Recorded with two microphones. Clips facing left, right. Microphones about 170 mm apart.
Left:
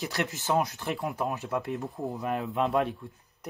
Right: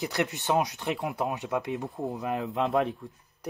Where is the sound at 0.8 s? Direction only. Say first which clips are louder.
Right 1 dB; 20° right (ahead or behind).